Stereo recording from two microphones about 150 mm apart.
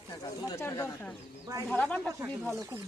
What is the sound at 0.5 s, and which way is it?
Speech, 15° left (ahead or behind).